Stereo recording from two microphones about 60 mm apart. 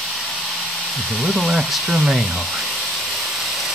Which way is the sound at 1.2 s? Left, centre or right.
Centre.